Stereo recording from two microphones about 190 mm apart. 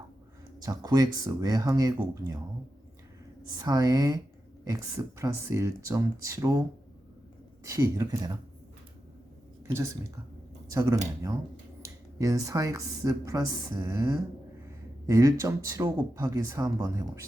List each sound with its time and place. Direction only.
0.6 s speech: 20° right (ahead or behind)
3.6 s speech: 20° right (ahead or behind)
9.6 s speech: 15° right (ahead or behind)